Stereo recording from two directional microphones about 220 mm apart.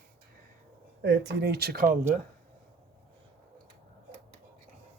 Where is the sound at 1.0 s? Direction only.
55° right (ahead or behind); by 2.2 s 40° right (ahead or behind).